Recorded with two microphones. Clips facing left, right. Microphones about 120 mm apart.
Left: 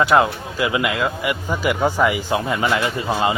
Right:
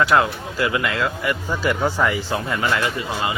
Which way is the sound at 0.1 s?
15° left (ahead or behind).